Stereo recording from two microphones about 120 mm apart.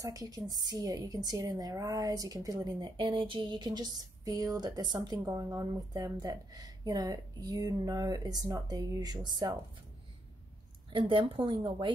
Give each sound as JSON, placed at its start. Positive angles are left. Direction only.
{"t": 0.0, "sound": "a woman's voice", "side_deg": -30}
{"t": 10.9, "sound": "a woman's voice", "side_deg": -45}